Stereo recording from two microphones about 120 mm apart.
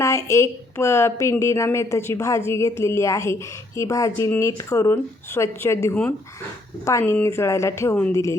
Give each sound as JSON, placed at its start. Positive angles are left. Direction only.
{"t": 0.0, "sound": "a woman's voice", "side_deg": 25}